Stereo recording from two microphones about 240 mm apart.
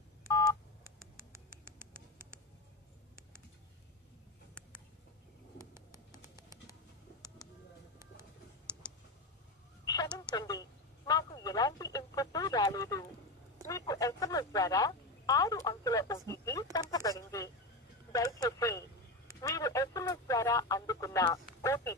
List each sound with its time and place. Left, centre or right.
0.3 s telephone dialing: centre
5.6 s pigeon: centre
10.1 s speech: centre
19.4 s radio: centre
21.5 s speech: centre